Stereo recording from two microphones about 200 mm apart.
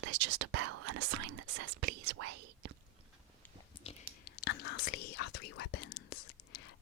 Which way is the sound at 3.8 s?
30° left (ahead or behind).